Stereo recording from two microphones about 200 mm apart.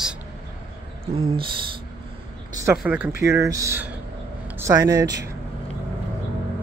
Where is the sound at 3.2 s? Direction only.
15° right (ahead or behind).